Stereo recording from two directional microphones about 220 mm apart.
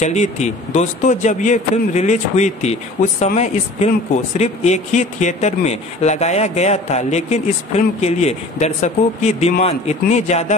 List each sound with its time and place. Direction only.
0.0 s speech: 30° left (ahead or behind)